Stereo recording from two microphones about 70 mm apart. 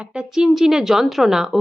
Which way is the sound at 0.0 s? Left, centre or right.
Centre.